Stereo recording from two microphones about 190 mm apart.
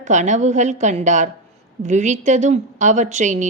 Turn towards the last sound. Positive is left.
turn(degrees=-40)  # may be behind; listen again after turning